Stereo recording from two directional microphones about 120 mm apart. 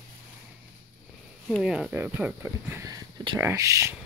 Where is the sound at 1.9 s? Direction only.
15° right (ahead or behind).